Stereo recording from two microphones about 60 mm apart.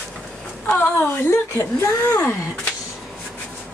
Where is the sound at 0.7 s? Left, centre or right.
Left.